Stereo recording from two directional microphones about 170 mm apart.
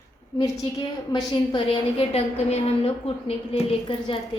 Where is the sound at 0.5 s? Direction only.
30° left (ahead or behind).